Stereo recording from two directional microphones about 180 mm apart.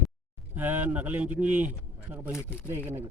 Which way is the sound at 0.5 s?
10° right (ahead or behind).